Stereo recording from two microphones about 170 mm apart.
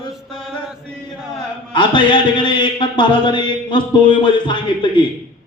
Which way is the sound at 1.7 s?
30° left (ahead or behind).